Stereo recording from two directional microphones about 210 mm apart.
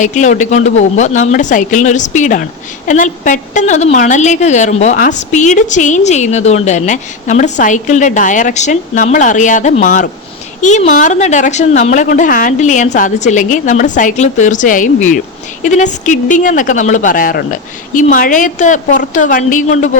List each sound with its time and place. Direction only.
0.0 s speech: 35° left (ahead or behind)